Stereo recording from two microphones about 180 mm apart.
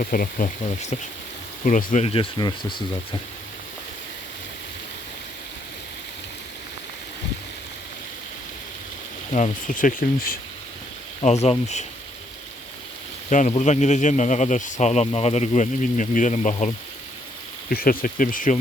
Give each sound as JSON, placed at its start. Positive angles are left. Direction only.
{"t": 0.0, "sound": "speech", "side_deg": 50}
{"t": 9.3, "sound": "speech", "side_deg": 45}
{"t": 11.2, "sound": "speech", "side_deg": 35}
{"t": 13.5, "sound": "speech", "side_deg": 40}
{"t": 17.7, "sound": "speech", "side_deg": 55}